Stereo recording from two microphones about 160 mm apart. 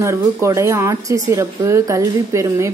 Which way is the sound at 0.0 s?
15° right (ahead or behind).